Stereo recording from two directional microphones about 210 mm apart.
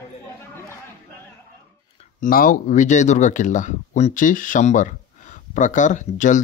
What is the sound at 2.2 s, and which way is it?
Speech, 40° left (ahead or behind).